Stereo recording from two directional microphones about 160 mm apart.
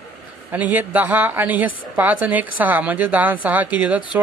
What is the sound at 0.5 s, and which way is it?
Speech, 10° right (ahead or behind).